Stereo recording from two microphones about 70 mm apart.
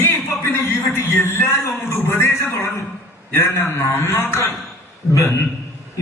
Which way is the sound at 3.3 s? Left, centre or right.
Left.